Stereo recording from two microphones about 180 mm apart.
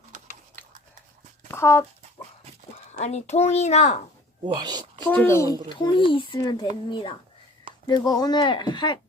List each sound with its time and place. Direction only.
1.5 s a sound: 15° left (ahead or behind)
3.0 s a child's voice: 35° left (ahead or behind)
4.4 s speech: 25° right (ahead or behind)
5.0 s a child's voice: 10° left (ahead or behind)